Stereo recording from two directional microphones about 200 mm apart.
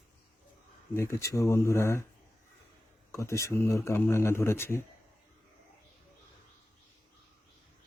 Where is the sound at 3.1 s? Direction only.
15° left (ahead or behind).